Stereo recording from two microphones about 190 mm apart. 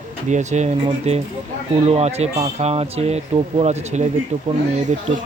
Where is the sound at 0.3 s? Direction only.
40° right (ahead or behind).